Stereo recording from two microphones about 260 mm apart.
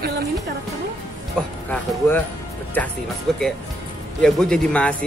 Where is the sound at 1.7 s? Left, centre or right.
Centre.